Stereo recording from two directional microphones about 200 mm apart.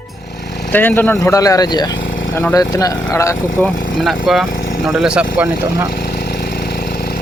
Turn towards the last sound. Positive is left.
turn(degrees=-15)  # may be behind; listen again after turning